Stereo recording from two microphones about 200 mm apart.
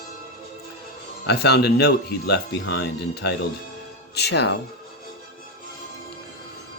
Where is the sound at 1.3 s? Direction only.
55° left (ahead or behind).